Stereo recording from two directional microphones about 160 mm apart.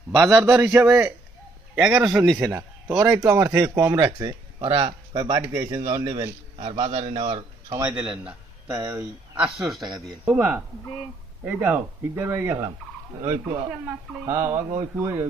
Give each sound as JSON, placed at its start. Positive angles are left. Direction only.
{"t": 0.2, "sound": "speech", "side_deg": -5}
{"t": 2.3, "sound": "a man's voice", "side_deg": -20}
{"t": 7.9, "sound": "a man's voice", "side_deg": -5}